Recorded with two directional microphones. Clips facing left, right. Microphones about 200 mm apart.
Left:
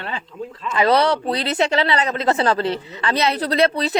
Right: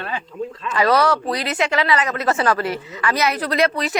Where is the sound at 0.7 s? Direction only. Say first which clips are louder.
Left 1 dB; 25° left (ahead or behind).